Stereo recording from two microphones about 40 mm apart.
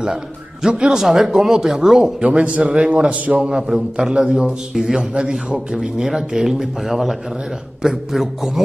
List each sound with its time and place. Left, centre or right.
0.0 s a man's voice: centre
0.9 s a man's voice: centre
2.2 s speech: right
3.5 s a man's voice: centre